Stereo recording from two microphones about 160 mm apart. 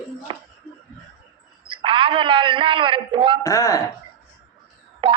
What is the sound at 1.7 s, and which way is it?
A man's voice, 30° right (ahead or behind).